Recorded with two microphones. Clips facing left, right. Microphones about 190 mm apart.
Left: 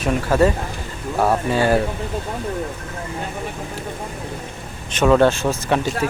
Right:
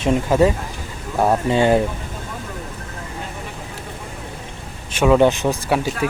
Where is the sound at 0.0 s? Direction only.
20° right (ahead or behind).